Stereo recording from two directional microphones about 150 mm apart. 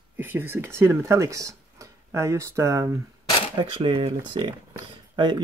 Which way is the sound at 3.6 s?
35° right (ahead or behind).